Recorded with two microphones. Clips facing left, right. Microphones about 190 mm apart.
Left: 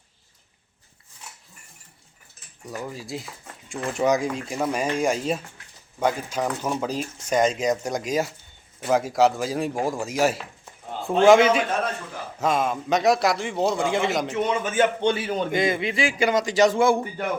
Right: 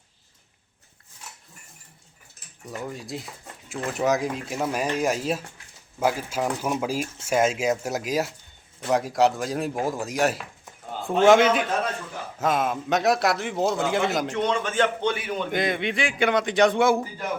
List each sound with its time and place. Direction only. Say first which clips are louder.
2.6 s speech: even; centre (ahead or behind)
15.0 s a man's voice: left 3 dB; 30° left (ahead or behind)
15.4 s speech: left 1 dB; centre (ahead or behind)